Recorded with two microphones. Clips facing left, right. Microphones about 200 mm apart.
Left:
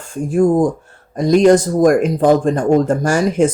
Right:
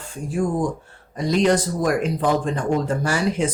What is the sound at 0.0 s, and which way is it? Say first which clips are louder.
Speech: left 9 dB; 50° left (ahead or behind).